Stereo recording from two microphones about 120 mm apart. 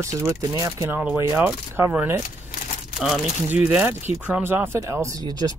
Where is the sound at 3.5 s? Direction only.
15° right (ahead or behind).